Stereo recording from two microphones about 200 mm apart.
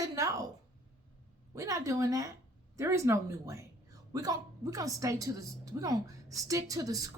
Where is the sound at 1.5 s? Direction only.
15° right (ahead or behind).